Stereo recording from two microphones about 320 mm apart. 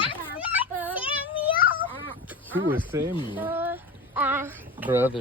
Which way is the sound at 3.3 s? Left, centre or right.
Centre.